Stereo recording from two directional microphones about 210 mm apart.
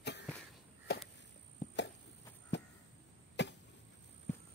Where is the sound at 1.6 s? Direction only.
35° left (ahead or behind).